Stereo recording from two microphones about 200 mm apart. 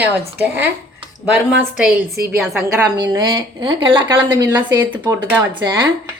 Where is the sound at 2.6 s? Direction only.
15° right (ahead or behind).